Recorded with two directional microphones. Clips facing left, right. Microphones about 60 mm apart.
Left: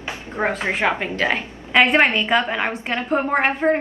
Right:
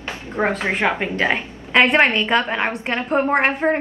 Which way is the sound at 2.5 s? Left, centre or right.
Centre.